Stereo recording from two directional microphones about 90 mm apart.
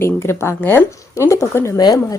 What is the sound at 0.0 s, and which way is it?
A woman's voice, 30° left (ahead or behind).